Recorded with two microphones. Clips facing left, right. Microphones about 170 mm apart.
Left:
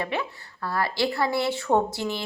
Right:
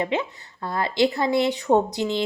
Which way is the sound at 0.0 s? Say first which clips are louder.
Right 4 dB; 20° right (ahead or behind).